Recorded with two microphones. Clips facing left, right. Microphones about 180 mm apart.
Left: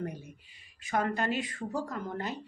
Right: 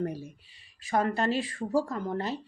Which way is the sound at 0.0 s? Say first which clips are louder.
Right 5 dB; 35° right (ahead or behind).